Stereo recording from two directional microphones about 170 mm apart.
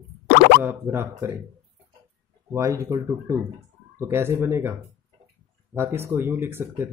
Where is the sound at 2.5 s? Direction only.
20° right (ahead or behind).